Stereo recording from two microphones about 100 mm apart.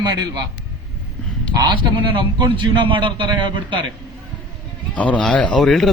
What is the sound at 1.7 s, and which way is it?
A man's voice, 50° right (ahead or behind).